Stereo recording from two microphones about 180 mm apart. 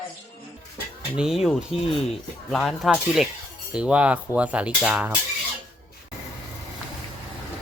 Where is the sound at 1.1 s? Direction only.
5° right (ahead or behind).